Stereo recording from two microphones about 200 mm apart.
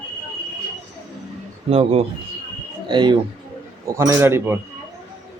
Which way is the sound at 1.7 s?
30° right (ahead or behind).